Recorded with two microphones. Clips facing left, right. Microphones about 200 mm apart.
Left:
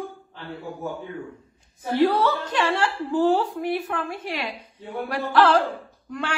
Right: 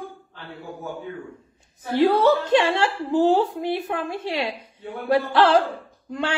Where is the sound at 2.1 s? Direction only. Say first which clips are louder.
Right 6 dB; 25° right (ahead or behind).